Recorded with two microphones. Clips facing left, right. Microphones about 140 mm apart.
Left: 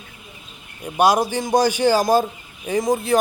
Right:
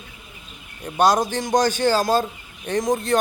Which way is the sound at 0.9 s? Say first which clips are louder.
Left 1 dB; 10° left (ahead or behind).